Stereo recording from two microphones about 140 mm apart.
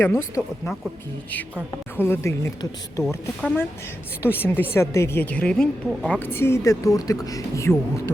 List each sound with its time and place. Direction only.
0.0 s speech: 15° left (ahead or behind)
2.0 s speech: 20° left (ahead or behind)
4.2 s speech: 15° left (ahead or behind)
6.1 s speech: 15° left (ahead or behind)